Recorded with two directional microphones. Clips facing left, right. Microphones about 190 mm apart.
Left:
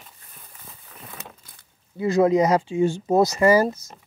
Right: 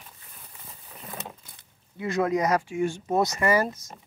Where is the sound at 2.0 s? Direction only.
30° left (ahead or behind).